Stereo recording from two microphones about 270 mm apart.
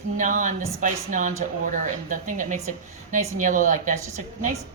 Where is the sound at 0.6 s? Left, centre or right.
Centre.